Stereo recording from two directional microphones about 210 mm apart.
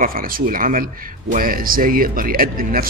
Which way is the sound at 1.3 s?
40° right (ahead or behind).